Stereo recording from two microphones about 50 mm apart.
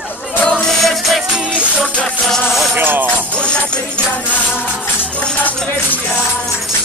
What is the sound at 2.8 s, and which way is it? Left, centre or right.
Music, right.